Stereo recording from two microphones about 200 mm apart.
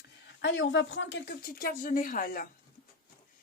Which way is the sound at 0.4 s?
65° left (ahead or behind).